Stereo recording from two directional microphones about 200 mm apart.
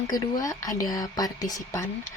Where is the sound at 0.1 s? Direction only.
20° left (ahead or behind).